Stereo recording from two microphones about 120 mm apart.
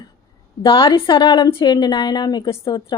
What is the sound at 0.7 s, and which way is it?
Speech, 45° left (ahead or behind).